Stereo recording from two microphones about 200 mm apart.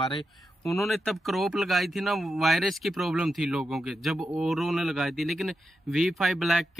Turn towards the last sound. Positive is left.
turn(degrees=0)  # may be behind; listen again after turning